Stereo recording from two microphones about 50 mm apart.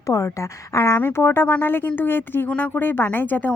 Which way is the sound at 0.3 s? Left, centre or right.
Left.